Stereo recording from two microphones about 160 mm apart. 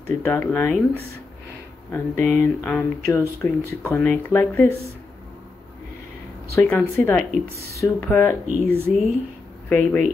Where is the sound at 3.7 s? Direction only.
15° left (ahead or behind).